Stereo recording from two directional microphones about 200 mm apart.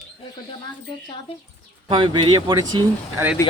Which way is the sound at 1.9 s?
25° right (ahead or behind).